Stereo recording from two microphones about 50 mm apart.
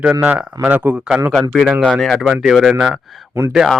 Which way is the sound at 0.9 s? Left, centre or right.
Centre.